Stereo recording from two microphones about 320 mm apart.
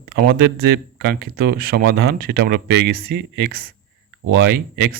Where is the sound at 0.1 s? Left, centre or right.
Right.